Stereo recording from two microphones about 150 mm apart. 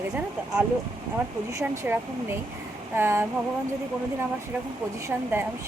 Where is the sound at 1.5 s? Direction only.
15° right (ahead or behind).